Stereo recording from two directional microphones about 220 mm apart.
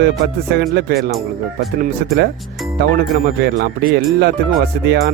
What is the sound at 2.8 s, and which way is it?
Speech, 50° right (ahead or behind).